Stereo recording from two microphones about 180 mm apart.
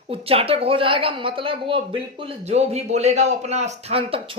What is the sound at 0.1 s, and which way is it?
A woman's voice, 30° right (ahead or behind).